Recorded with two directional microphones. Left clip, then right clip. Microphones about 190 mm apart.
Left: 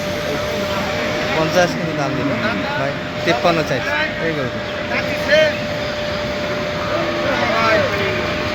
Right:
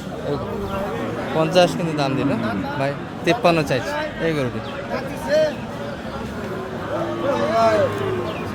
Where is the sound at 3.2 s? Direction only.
20° right (ahead or behind).